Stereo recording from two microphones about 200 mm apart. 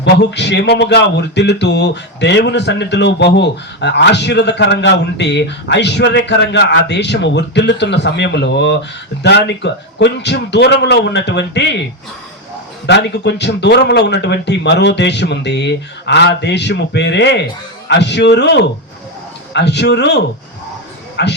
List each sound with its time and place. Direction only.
0.0 s speech: 60° left (ahead or behind)
12.8 s a man's voice: 60° left (ahead or behind)